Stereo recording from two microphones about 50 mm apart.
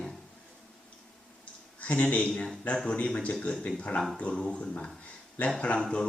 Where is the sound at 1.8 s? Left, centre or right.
Left.